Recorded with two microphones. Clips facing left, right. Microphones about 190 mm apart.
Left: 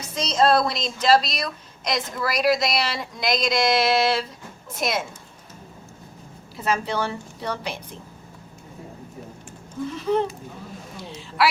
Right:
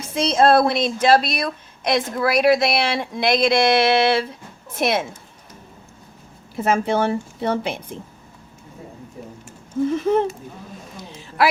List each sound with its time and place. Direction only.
0.0 s speech: 55° right (ahead or behind)
6.6 s a woman's voice: 55° right (ahead or behind)
9.9 s speech: 50° right (ahead or behind)